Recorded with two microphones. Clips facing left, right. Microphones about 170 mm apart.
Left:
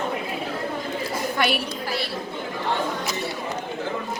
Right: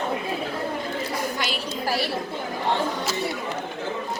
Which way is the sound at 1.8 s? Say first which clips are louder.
Right 3 dB; 40° right (ahead or behind).